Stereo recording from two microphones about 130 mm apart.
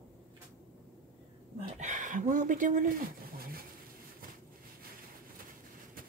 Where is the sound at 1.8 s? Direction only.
70° right (ahead or behind).